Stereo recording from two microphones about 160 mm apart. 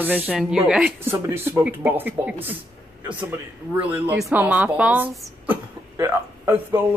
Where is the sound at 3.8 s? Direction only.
10° right (ahead or behind).